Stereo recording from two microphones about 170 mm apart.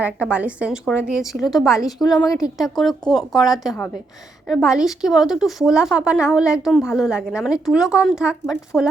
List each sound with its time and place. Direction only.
0.0 s a woman's voice: 10° right (ahead or behind)
2.0 s a woman's voice: 20° left (ahead or behind)
2.7 s speech: centre (ahead or behind)